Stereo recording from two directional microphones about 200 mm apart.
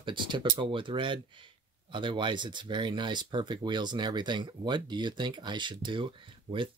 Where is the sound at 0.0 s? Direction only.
25° right (ahead or behind).